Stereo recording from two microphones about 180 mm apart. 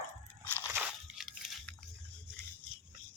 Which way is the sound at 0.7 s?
5° right (ahead or behind).